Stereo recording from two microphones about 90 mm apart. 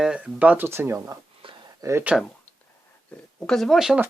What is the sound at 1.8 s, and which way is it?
Speech, 45° right (ahead or behind).